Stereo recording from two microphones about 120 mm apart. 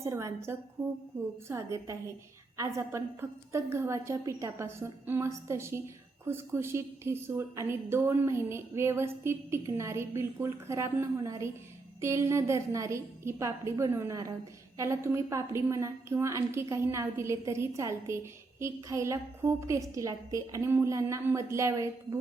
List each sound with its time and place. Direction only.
0.0 s a woman's voice: 25° right (ahead or behind)